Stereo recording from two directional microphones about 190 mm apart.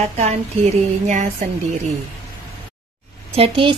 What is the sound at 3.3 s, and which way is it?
Speech, 30° right (ahead or behind).